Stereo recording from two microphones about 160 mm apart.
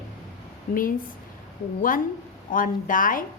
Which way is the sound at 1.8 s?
60° left (ahead or behind).